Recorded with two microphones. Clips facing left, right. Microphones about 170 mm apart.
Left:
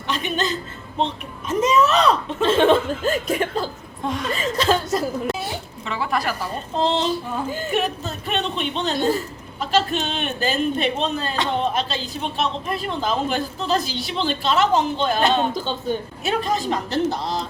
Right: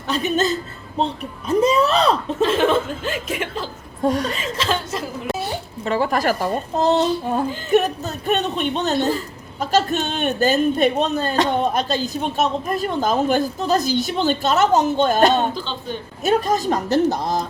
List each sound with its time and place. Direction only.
0.1 s speech: 40° right (ahead or behind)
2.4 s chuckle: 30° left (ahead or behind)
4.0 s speech: 40° right (ahead or behind)
4.4 s chuckle: 35° left (ahead or behind)
5.8 s a woman's voice: 40° right (ahead or behind)